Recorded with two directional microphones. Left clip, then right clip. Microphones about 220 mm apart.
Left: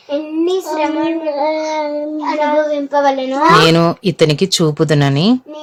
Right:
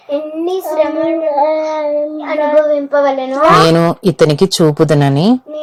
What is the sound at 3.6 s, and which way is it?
Speech, 10° right (ahead or behind).